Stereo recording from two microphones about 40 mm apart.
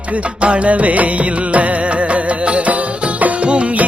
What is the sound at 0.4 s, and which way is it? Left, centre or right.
Music, right.